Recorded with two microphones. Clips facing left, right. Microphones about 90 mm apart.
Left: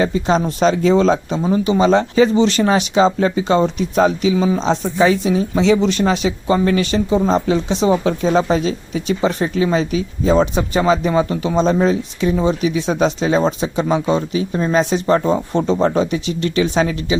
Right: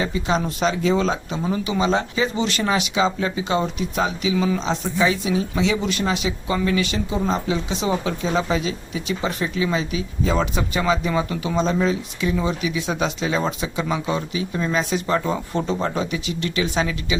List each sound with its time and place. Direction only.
0.0 s speech: 35° left (ahead or behind)
4.4 s speech: 25° left (ahead or behind)
4.6 s speech: 40° left (ahead or behind)